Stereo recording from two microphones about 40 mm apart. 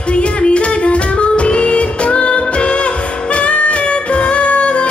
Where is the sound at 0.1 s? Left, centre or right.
Left.